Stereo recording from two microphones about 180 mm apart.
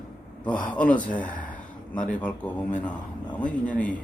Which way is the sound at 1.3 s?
45° left (ahead or behind).